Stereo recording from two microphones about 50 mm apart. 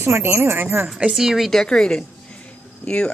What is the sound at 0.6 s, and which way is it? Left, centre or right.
Speech, right.